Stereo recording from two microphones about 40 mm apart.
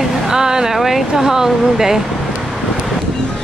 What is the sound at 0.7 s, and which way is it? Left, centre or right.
Speech, centre.